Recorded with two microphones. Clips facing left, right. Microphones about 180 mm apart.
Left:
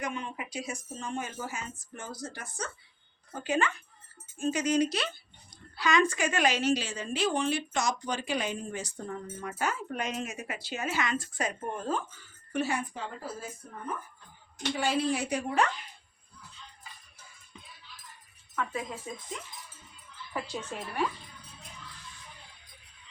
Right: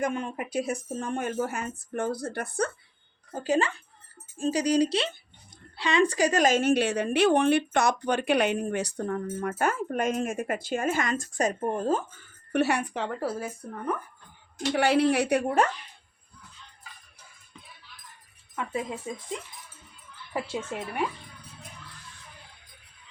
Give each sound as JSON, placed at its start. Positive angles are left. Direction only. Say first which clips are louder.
{"t": 0.0, "sound": "a woman's voice", "louder": "right 7 dB", "side_deg": -45}
{"t": 3.3, "sound": "a woman's voice", "louder": "right 4 dB", "side_deg": -40}
{"t": 20.3, "sound": "speech", "louder": "right 5 dB", "side_deg": -25}